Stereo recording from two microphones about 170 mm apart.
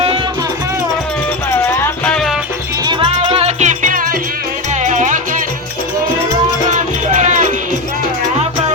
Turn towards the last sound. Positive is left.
turn(degrees=-45)  # may be behind; listen again after turning